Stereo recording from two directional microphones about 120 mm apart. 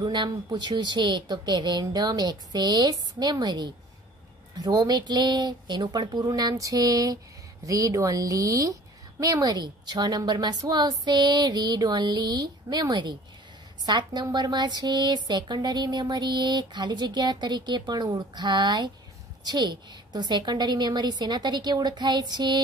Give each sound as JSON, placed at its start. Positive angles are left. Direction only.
{"t": 0.0, "sound": "a woman's voice", "side_deg": -40}